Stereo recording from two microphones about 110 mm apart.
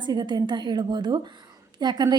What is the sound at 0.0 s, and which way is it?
A woman's voice, 40° right (ahead or behind).